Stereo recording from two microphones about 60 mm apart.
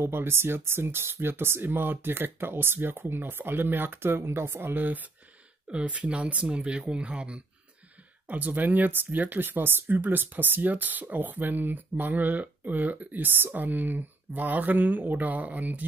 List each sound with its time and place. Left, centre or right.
0.0 s speech: right; by 7.4 s centre
8.3 s speech: right